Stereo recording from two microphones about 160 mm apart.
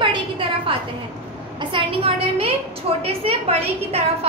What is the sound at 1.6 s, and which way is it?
A woman's voice, 35° right (ahead or behind).